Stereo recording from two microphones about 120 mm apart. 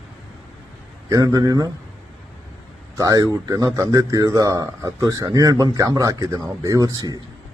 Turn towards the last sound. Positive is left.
turn(degrees=-30)  # may be behind; listen again after turning